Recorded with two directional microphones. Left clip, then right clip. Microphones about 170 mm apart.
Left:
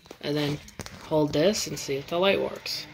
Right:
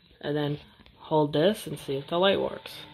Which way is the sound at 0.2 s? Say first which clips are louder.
Left 1 dB; 10° right (ahead or behind).